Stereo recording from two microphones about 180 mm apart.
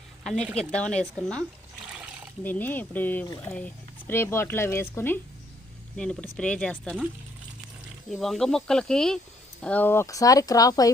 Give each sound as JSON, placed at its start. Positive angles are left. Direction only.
{"t": 0.3, "sound": "speech", "side_deg": 5}
{"t": 1.9, "sound": "a sound", "side_deg": -5}
{"t": 2.4, "sound": "speech", "side_deg": 10}
{"t": 8.1, "sound": "speech", "side_deg": 0}